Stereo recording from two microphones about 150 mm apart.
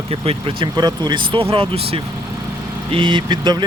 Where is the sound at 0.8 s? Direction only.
25° right (ahead or behind).